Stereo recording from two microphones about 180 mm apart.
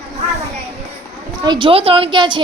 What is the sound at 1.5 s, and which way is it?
Speech, 30° right (ahead or behind).